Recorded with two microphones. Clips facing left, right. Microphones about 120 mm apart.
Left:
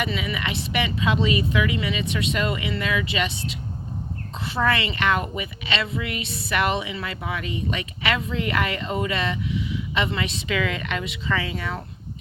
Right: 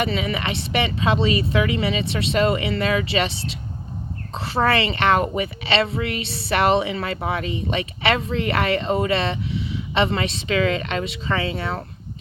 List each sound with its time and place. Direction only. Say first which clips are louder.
0.0 s a woman's voice: right 4 dB; 35° right (ahead or behind)